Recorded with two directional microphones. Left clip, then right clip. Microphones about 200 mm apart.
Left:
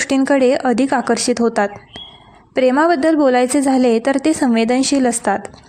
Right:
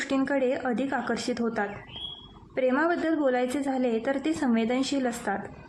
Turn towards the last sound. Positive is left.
turn(degrees=40)  # may be behind; listen again after turning